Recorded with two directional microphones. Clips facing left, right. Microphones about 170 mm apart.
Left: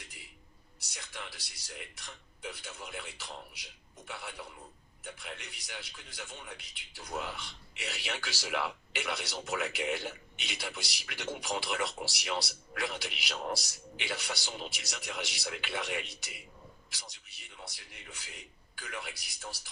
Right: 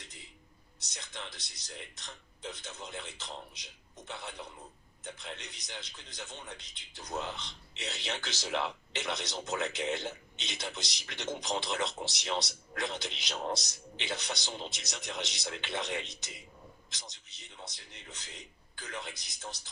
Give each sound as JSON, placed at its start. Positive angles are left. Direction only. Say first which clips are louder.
{"t": 0.7, "sound": "a man's voice", "louder": "even", "side_deg": -20}